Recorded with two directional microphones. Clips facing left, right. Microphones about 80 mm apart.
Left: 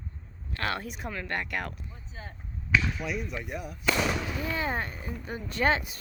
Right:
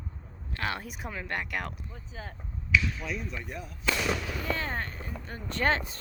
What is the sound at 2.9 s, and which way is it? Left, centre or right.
Speech, centre.